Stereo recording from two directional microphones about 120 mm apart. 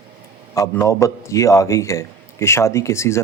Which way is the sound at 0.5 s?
25° left (ahead or behind).